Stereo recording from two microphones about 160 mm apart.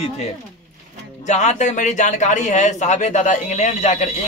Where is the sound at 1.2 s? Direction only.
45° left (ahead or behind).